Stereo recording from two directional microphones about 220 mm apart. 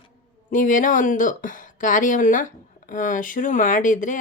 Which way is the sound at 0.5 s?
35° left (ahead or behind).